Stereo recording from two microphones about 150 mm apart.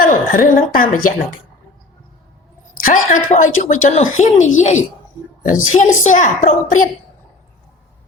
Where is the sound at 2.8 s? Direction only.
60° left (ahead or behind).